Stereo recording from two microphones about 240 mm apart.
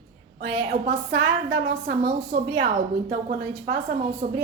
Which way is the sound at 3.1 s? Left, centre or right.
Right.